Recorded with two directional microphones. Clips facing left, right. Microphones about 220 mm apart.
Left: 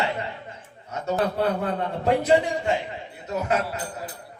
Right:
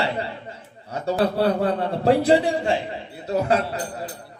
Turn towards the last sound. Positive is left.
turn(degrees=-35)  # may be behind; listen again after turning